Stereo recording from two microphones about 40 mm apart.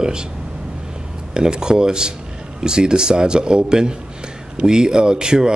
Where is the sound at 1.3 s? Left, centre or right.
Centre.